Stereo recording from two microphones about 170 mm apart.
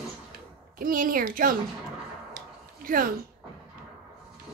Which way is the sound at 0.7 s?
55° right (ahead or behind).